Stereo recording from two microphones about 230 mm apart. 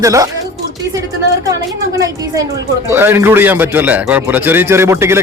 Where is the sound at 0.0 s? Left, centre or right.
Centre.